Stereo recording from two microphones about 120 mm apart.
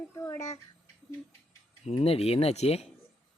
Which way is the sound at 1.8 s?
60° left (ahead or behind).